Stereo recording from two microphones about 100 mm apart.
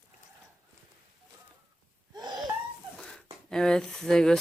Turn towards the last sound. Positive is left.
turn(degrees=5)  # may be behind; listen again after turning